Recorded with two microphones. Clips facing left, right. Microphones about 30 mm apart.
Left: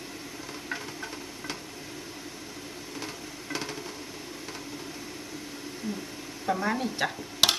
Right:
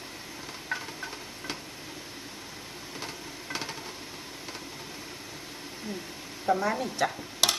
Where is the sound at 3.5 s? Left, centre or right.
Centre.